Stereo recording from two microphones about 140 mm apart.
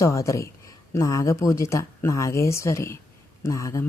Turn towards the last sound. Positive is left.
turn(degrees=20)  # may be behind; listen again after turning